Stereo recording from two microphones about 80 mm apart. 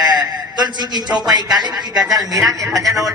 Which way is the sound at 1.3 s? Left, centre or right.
Right.